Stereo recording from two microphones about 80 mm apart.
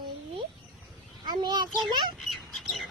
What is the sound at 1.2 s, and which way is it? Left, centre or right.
Speech, right.